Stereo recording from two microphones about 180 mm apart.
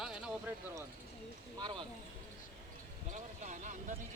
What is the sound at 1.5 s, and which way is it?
Speech, 25° right (ahead or behind).